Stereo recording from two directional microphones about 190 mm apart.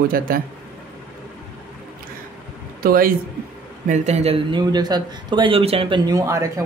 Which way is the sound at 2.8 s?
50° right (ahead or behind).